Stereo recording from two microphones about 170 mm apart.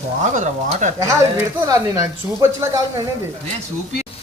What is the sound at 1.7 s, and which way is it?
Speech, 20° right (ahead or behind).